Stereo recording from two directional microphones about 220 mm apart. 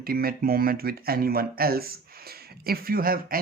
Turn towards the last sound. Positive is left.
turn(degrees=-40)  # may be behind; listen again after turning